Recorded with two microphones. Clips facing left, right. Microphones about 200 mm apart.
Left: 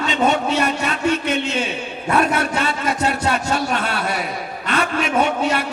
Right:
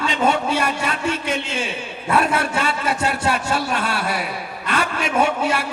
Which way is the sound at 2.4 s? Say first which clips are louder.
Left 1 dB; 25° left (ahead or behind).